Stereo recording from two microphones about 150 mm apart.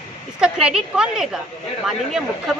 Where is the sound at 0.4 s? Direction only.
5° right (ahead or behind).